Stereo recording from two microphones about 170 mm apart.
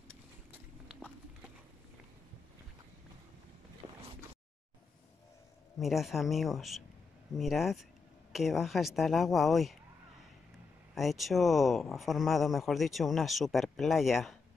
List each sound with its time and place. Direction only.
3.8 s boat: 15° right (ahead or behind)
5.8 s speech: centre (ahead or behind)
11.0 s speech: centre (ahead or behind)